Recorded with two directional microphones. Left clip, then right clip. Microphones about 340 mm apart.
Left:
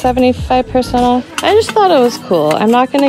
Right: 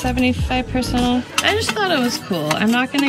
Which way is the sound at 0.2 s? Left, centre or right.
Centre.